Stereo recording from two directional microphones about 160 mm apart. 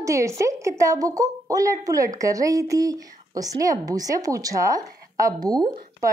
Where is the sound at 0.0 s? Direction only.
20° right (ahead or behind).